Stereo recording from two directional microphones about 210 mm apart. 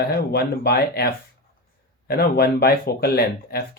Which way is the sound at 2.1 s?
45° left (ahead or behind).